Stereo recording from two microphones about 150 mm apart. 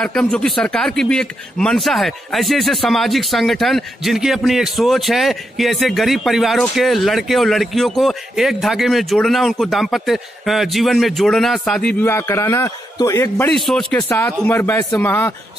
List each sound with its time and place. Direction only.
0.0 s a man's voice: 5° left (ahead or behind)
12.1 s a man's voice: 15° left (ahead or behind)
13.7 s a man's voice: centre (ahead or behind)
14.0 s speech: 15° left (ahead or behind)